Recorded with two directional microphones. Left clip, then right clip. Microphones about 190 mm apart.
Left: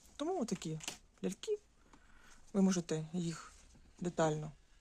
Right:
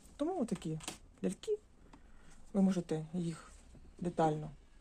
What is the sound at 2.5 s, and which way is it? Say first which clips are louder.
Speech: even; 30° left (ahead or behind).